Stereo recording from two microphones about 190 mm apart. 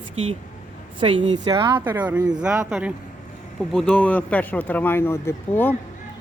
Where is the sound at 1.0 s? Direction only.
25° right (ahead or behind).